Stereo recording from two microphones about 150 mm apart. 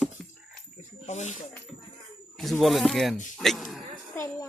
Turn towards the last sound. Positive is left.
turn(degrees=20)  # may be behind; listen again after turning